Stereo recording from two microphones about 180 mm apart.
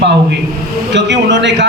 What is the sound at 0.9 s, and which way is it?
Speech, 75° right (ahead or behind).